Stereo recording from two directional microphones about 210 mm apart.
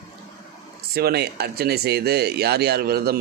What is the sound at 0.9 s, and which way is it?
Speech, 50° right (ahead or behind).